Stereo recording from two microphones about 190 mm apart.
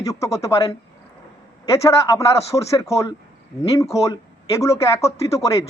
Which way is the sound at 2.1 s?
15° left (ahead or behind).